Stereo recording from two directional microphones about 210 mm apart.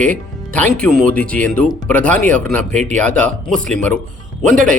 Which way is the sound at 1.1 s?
40° right (ahead or behind).